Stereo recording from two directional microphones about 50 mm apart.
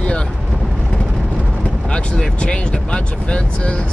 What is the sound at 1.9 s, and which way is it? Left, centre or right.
Speech, left.